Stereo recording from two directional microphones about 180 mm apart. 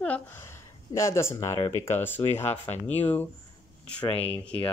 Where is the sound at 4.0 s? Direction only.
30° left (ahead or behind).